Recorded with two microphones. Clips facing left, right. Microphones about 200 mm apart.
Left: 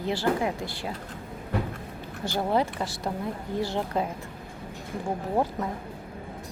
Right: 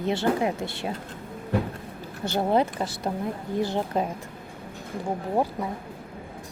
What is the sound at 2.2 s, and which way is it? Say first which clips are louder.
A woman's voice: right 3 dB; 20° right (ahead or behind).